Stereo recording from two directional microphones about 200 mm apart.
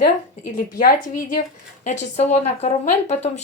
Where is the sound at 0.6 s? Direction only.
45° left (ahead or behind).